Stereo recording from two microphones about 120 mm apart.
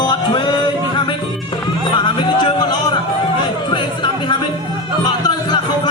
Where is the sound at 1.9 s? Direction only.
40° left (ahead or behind).